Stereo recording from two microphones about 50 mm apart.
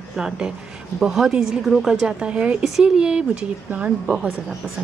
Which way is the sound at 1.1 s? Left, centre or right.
Centre.